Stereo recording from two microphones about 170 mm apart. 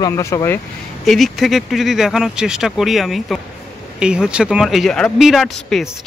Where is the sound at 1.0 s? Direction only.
Centre (ahead or behind).